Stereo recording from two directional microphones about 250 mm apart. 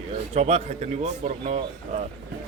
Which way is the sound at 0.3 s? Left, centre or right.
Right.